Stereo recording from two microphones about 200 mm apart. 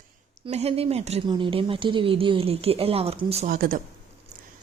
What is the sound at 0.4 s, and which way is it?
Speech, 30° right (ahead or behind).